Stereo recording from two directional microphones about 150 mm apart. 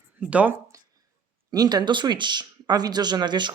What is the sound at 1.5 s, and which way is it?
A man's voice, 25° right (ahead or behind).